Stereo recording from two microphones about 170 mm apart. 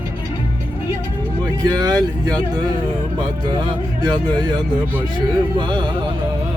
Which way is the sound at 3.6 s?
25° right (ahead or behind).